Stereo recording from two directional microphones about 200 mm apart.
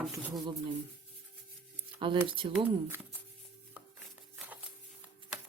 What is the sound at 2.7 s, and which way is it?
Speech, 10° right (ahead or behind).